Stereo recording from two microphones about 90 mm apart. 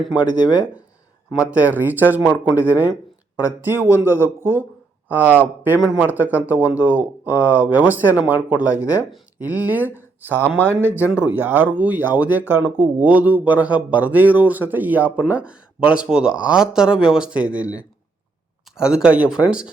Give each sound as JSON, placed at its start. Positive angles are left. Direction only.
{"t": 0.3, "sound": "speech", "side_deg": 55}
{"t": 1.4, "sound": "speech", "side_deg": -15}